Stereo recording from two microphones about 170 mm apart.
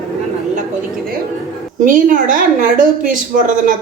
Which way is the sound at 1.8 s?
55° right (ahead or behind).